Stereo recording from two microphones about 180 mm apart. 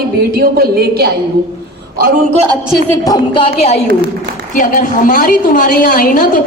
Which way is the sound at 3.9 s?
70° right (ahead or behind).